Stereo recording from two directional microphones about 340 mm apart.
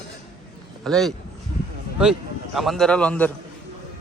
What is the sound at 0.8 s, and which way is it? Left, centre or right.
A man's voice, centre.